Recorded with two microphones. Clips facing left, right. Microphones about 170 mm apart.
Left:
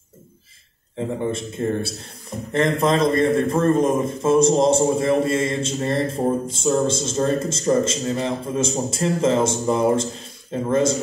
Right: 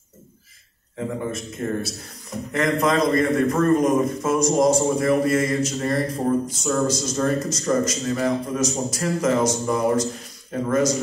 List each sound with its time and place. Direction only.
0.9 s a man's voice: 30° left (ahead or behind)